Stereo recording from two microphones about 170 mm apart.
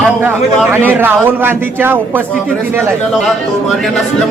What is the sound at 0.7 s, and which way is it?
A man's voice, 10° right (ahead or behind).